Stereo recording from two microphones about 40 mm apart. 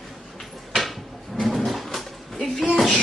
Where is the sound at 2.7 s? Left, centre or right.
Centre.